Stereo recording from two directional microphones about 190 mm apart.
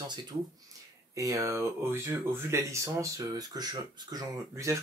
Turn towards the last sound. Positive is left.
turn(degrees=-15)  # may be behind; listen again after turning